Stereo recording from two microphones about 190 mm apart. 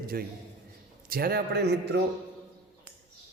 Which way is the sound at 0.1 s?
50° right (ahead or behind).